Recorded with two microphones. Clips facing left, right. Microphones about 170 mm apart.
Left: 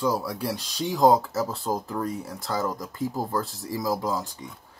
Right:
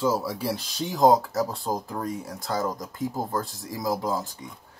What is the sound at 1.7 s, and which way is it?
Speech, 20° right (ahead or behind).